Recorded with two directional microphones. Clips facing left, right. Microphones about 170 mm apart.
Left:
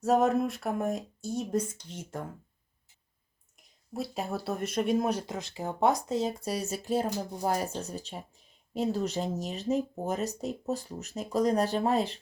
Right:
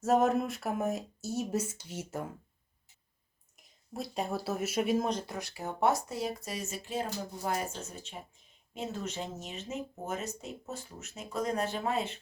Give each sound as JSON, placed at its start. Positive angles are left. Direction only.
{"t": 0.0, "sound": "speech", "side_deg": 0}
{"t": 3.6, "sound": "speech", "side_deg": 0}
{"t": 5.2, "sound": "speech", "side_deg": 20}